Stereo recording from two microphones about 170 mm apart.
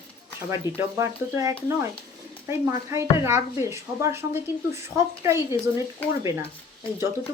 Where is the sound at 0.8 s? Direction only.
15° right (ahead or behind).